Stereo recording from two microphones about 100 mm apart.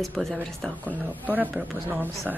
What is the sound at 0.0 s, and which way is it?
Speech, centre (ahead or behind).